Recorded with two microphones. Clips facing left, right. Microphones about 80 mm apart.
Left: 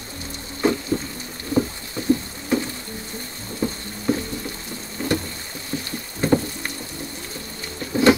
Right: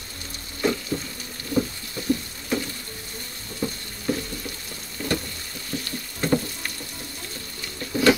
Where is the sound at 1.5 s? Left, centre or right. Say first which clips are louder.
Left 3 dB; left.